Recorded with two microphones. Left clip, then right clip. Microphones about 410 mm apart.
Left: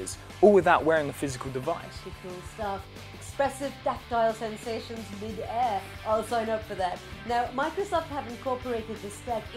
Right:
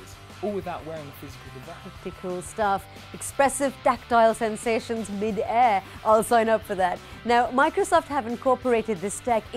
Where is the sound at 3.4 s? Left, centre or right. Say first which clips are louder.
Right 6 dB; right.